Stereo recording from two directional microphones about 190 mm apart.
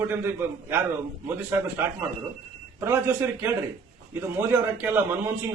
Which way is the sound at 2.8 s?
10° right (ahead or behind).